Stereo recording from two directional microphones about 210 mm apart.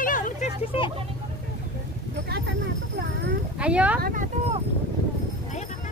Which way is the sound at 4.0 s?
40° right (ahead or behind).